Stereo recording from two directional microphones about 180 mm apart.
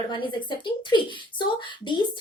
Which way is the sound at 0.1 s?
25° left (ahead or behind).